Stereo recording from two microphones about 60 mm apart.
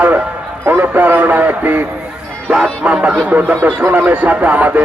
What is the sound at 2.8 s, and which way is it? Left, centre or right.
Speech, centre.